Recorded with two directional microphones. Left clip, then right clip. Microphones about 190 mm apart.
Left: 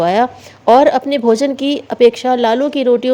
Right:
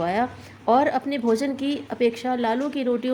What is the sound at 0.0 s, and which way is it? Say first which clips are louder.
Speech: left 11 dB; 40° left (ahead or behind).